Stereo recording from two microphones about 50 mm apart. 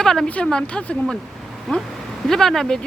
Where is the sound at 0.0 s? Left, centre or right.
Centre.